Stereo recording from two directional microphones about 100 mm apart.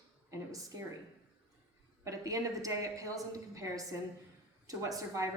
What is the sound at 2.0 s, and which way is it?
A woman's voice, 35° right (ahead or behind).